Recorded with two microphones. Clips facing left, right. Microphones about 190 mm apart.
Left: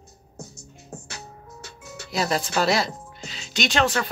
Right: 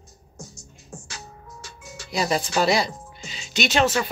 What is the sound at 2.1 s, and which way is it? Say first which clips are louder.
Speech: right 1 dB; centre (ahead or behind).